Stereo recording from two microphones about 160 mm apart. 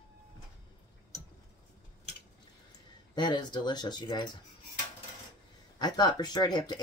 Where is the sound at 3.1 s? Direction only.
30° left (ahead or behind).